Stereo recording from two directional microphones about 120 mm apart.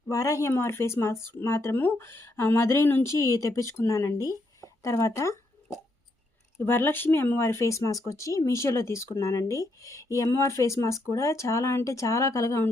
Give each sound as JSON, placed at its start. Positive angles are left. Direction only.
{"t": 0.1, "sound": "speech", "side_deg": 30}
{"t": 6.7, "sound": "speech", "side_deg": 20}